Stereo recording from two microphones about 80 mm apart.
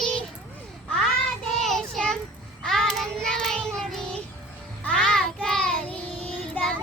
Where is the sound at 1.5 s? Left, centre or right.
Centre.